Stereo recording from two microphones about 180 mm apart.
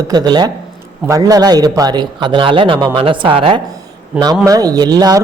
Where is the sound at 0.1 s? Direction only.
20° right (ahead or behind).